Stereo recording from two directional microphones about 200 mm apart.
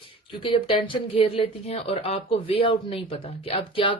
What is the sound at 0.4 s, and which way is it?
Speech, 25° left (ahead or behind).